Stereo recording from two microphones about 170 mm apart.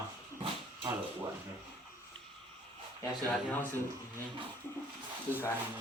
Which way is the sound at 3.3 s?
5° left (ahead or behind).